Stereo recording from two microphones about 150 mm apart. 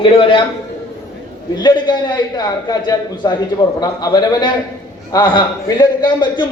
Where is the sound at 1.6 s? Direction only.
30° left (ahead or behind).